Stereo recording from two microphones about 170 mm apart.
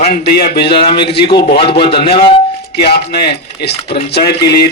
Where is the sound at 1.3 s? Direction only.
30° left (ahead or behind).